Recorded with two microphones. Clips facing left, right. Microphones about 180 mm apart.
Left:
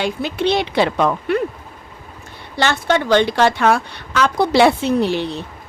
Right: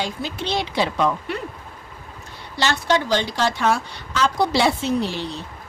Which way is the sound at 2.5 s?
55° left (ahead or behind).